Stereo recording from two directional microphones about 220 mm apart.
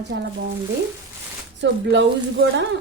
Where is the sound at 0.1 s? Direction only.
50° right (ahead or behind).